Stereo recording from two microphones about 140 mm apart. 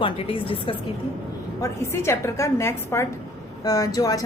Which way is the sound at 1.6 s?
20° left (ahead or behind).